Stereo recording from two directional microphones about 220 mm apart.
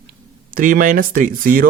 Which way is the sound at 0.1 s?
40° right (ahead or behind).